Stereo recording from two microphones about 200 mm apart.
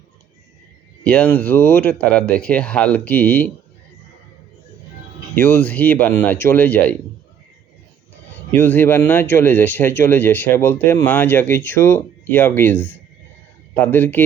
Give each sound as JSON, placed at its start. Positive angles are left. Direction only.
{"t": 1.0, "sound": "speech", "side_deg": 5}
{"t": 5.3, "sound": "speech", "side_deg": 10}
{"t": 8.5, "sound": "speech", "side_deg": 10}